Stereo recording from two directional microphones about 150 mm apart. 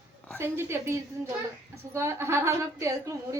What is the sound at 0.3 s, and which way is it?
A woman's voice, 15° right (ahead or behind).